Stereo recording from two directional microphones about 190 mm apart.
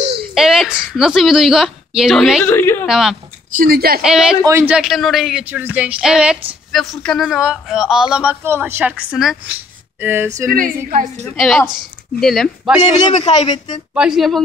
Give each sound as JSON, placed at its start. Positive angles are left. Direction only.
{"t": 0.3, "sound": "a woman's voice", "side_deg": 0}
{"t": 2.5, "sound": "a sound", "side_deg": 10}
{"t": 2.9, "sound": "speech", "side_deg": 0}
{"t": 3.5, "sound": "a woman's voice", "side_deg": -55}
{"t": 4.0, "sound": "speech", "side_deg": -5}
{"t": 10.5, "sound": "a woman's voice", "side_deg": -45}
{"t": 11.2, "sound": "speech", "side_deg": 0}
{"t": 13.3, "sound": "a woman's voice", "side_deg": 35}
{"t": 13.9, "sound": "speech", "side_deg": -5}